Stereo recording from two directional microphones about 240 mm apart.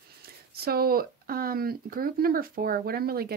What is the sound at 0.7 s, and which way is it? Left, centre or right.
Speech, right.